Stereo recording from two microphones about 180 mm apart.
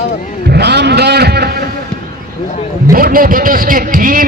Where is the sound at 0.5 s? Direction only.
65° right (ahead or behind).